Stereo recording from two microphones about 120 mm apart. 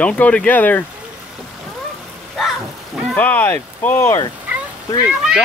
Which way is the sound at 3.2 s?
15° left (ahead or behind).